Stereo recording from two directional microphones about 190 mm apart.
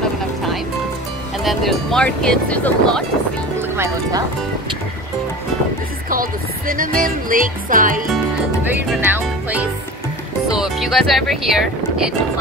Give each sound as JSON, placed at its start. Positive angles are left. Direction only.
{"t": 1.4, "sound": "speech", "side_deg": 0}
{"t": 3.7, "sound": "speech", "side_deg": -15}
{"t": 6.7, "sound": "music", "side_deg": -50}
{"t": 9.1, "sound": "music", "side_deg": -10}
{"t": 10.5, "sound": "speech", "side_deg": 0}